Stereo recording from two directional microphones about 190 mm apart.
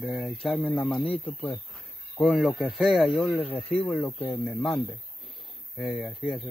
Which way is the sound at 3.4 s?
30° left (ahead or behind).